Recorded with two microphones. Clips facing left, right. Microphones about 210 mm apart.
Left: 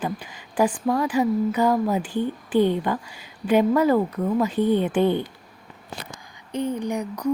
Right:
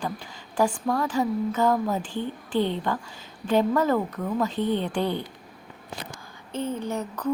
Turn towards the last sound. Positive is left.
turn(degrees=15)  # may be behind; listen again after turning